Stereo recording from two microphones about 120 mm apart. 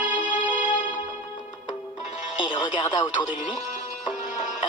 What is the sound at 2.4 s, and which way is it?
Speech, 40° left (ahead or behind).